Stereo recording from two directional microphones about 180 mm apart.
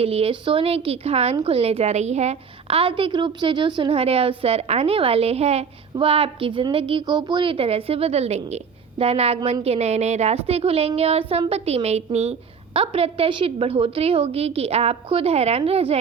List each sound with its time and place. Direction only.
0.0 s a woman's voice: 30° right (ahead or behind)